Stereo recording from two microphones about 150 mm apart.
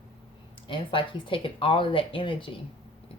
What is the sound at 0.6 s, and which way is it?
Speech, 35° left (ahead or behind).